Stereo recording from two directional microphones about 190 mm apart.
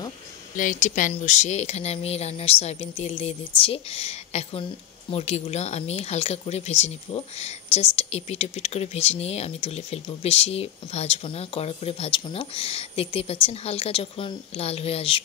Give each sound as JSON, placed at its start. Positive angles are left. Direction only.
{"t": 0.6, "sound": "speech", "side_deg": 40}